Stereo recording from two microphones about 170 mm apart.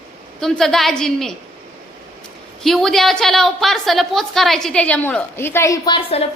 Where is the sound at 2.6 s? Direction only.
Centre (ahead or behind); by 5.9 s 20° left (ahead or behind).